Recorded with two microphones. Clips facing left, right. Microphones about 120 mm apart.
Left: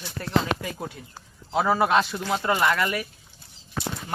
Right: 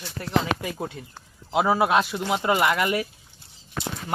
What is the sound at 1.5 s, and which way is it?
Speech, 10° right (ahead or behind).